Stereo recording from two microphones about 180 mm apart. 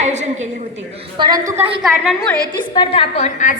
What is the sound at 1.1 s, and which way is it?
Speech, 25° right (ahead or behind).